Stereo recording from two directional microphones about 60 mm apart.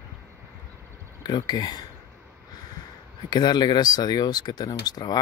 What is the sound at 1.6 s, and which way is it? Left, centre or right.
Speech, left.